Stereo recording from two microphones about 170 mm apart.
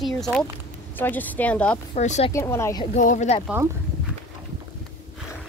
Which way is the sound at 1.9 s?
40° left (ahead or behind).